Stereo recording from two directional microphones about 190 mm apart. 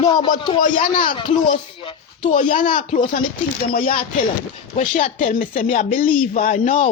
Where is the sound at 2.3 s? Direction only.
45° left (ahead or behind).